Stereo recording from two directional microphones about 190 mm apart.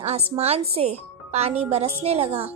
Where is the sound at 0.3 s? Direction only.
35° right (ahead or behind).